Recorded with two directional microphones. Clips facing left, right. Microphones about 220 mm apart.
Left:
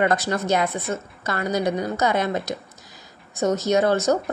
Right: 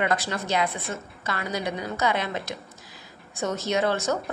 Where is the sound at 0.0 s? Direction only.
45° left (ahead or behind).